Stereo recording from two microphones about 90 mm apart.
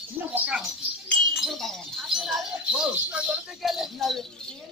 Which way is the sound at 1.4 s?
Centre (ahead or behind).